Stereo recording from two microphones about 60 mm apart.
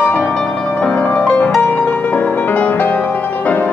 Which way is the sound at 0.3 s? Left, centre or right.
Centre.